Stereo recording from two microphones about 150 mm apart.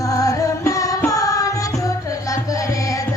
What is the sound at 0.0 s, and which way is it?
Music, 25° left (ahead or behind).